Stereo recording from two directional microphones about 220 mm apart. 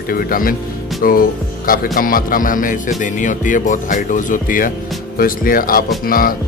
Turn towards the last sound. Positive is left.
turn(degrees=40)  # may be behind; listen again after turning